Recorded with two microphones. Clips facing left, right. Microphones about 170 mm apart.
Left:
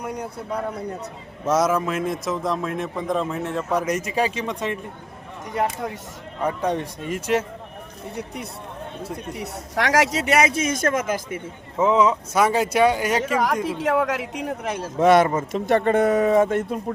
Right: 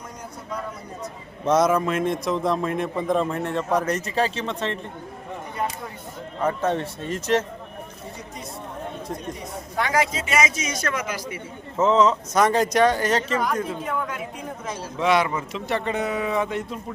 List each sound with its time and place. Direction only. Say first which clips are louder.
0.0 s a man's voice: left 8 dB; 65° left (ahead or behind)
1.5 s a man's voice: right 1 dB; 5° left (ahead or behind)
5.5 s speech: left 6 dB; 80° left
6.4 s speech: even; 15° left (ahead or behind)
9.3 s speech: left 2 dB; 80° left; by 11.4 s 50° left (ahead or behind)
11.8 s speech: even; 10° left (ahead or behind)
13.7 s speech: left 7 dB; 80° left
14.9 s speech: left 5 dB; 50° left (ahead or behind)